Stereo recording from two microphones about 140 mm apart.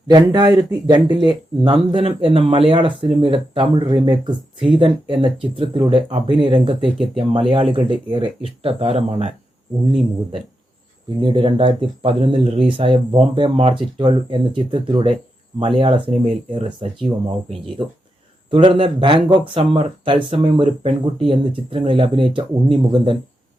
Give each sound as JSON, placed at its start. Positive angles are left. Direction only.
{"t": 0.1, "sound": "speech", "side_deg": -30}
{"t": 11.2, "sound": "speech", "side_deg": -35}
{"t": 17.8, "sound": "speech", "side_deg": -30}